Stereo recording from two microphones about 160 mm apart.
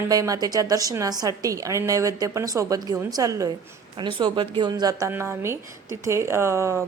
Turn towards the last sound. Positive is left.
turn(degrees=-15)  # may be behind; listen again after turning